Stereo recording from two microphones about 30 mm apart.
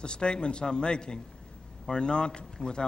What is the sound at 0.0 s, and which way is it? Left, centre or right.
Speech, left.